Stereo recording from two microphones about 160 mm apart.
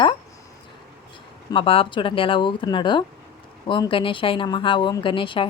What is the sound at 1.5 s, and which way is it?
A woman's voice, 35° left (ahead or behind).